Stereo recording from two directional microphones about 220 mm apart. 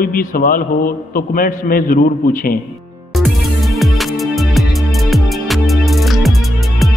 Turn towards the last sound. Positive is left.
turn(degrees=0)  # may be behind; listen again after turning